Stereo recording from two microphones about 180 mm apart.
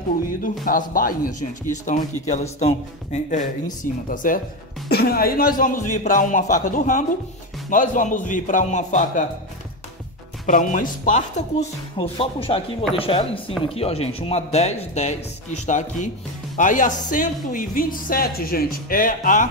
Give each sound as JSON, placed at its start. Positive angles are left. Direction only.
{"t": 0.7, "sound": "speech", "side_deg": 50}
{"t": 4.8, "sound": "speech", "side_deg": 60}
{"t": 10.4, "sound": "speech", "side_deg": 45}
{"t": 12.0, "sound": "speech", "side_deg": 30}